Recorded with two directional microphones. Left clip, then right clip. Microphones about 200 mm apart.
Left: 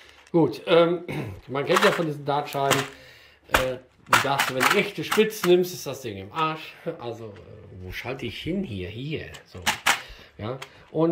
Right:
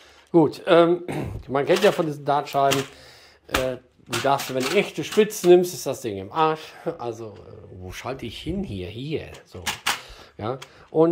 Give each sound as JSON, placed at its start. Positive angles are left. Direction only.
{"t": 0.3, "sound": "speech", "side_deg": -15}
{"t": 4.3, "sound": "speech", "side_deg": -15}
{"t": 8.2, "sound": "speech", "side_deg": -15}